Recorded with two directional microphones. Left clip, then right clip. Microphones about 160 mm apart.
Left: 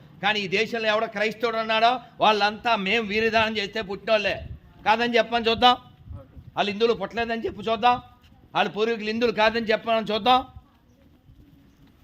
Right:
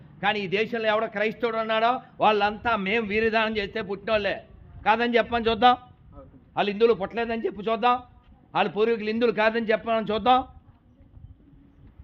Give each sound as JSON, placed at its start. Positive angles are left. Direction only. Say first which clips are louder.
{"t": 0.2, "sound": "a man's voice", "louder": "left 1 dB", "side_deg": -15}